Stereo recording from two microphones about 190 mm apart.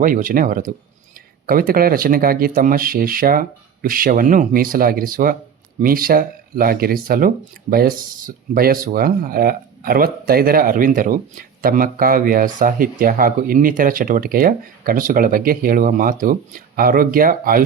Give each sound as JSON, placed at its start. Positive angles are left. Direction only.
{"t": 0.0, "sound": "speech", "side_deg": -45}